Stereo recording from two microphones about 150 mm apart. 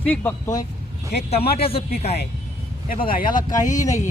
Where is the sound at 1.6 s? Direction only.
40° left (ahead or behind).